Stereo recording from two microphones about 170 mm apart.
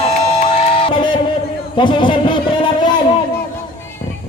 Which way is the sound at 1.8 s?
30° left (ahead or behind).